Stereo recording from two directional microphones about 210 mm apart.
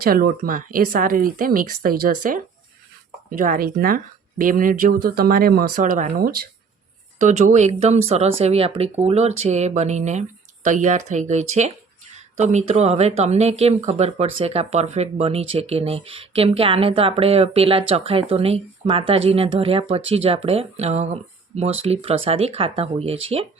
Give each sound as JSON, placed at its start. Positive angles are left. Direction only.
{"t": 0.0, "sound": "speech", "side_deg": -45}